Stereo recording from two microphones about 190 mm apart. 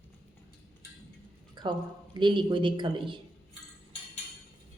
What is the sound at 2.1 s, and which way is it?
A man's voice, 25° right (ahead or behind).